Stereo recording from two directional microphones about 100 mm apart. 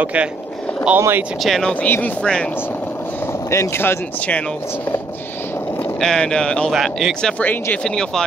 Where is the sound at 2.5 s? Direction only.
20° left (ahead or behind).